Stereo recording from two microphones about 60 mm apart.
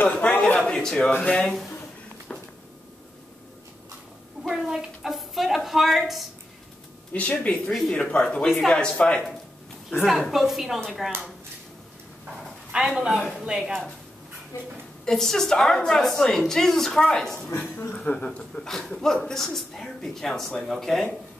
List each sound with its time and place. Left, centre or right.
0.1 s a man's voice: centre
0.7 s a sound: centre
1.3 s a woman's voice: centre
4.5 s a woman's voice: centre
7.1 s a woman's voice: left
10.0 s a woman's voice: centre
12.7 s a man's voice: centre
14.5 s a woman's voice: left
15.0 s a woman's voice: centre
17.9 s a woman's voice: centre